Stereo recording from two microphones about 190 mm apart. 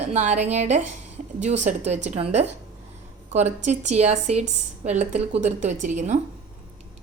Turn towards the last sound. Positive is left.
turn(degrees=-40)  # may be behind; listen again after turning